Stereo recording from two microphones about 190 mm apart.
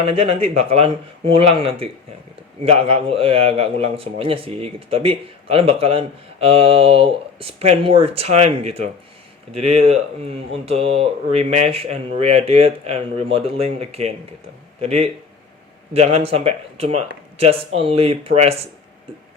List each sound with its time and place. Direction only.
0.0 s a man's voice: 30° right (ahead or behind)